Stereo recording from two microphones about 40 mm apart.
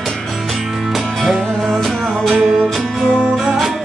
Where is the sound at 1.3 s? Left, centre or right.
Centre.